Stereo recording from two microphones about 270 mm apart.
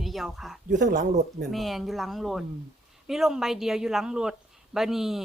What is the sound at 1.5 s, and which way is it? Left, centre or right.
Speech, centre.